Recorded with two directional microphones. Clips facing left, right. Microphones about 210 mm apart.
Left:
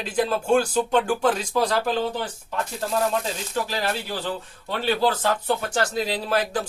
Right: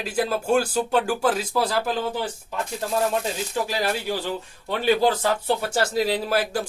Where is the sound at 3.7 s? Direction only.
10° right (ahead or behind).